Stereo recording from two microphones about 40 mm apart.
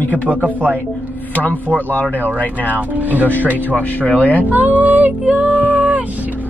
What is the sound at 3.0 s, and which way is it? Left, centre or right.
Speech, right.